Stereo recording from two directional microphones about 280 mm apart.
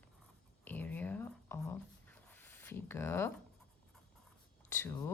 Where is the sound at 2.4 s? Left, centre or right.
Centre.